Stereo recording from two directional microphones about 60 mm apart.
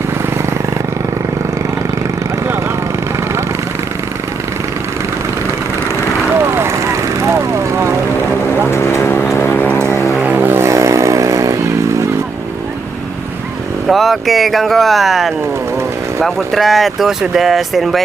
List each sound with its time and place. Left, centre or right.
6.4 s vehicle: right
8.7 s vehicle: left
9.3 s music: left
10.2 s vehicle: right
10.6 s vehicle: right
13.8 s speech: centre